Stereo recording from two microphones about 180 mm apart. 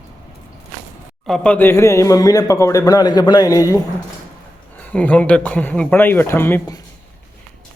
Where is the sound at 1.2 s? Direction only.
5° left (ahead or behind); by 3.8 s 20° left (ahead or behind).